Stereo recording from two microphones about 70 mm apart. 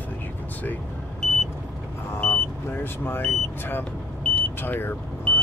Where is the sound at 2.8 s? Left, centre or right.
Left.